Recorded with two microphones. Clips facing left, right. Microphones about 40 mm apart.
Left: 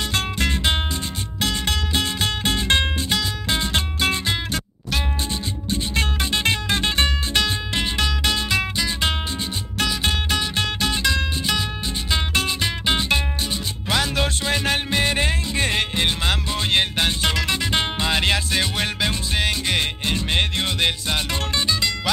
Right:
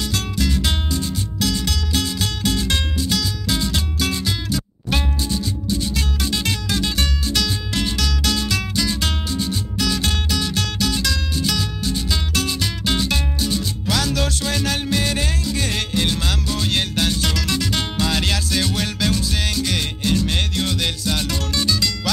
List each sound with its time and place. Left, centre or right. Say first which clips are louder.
0.1 s music: even; left